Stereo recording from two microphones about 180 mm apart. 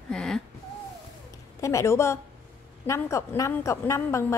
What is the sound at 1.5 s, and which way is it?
A woman's voice, 15° left (ahead or behind).